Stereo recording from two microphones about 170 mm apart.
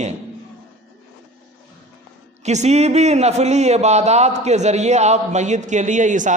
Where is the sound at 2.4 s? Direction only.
40° right (ahead or behind).